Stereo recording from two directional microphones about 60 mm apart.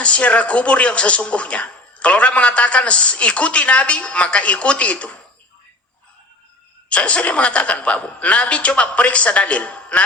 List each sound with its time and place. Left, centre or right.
0.0 s speech: left
6.9 s speech: left